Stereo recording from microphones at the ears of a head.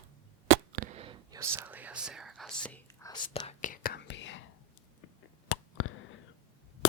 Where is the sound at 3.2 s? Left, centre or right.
Left.